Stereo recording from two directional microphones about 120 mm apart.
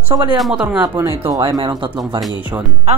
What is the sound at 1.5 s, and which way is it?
Speech, 40° right (ahead or behind).